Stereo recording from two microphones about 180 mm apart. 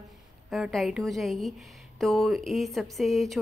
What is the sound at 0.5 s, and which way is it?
A woman's voice, centre (ahead or behind).